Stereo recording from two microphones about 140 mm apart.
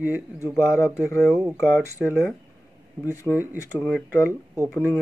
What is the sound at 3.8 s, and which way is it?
Speech, centre (ahead or behind).